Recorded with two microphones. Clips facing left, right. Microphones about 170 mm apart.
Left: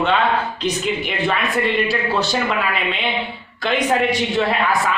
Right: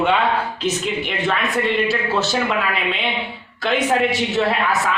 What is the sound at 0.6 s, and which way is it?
A man's voice, centre (ahead or behind).